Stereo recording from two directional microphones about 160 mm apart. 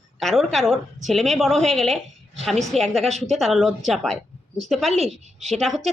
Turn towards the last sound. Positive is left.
turn(degrees=0)  # may be behind; listen again after turning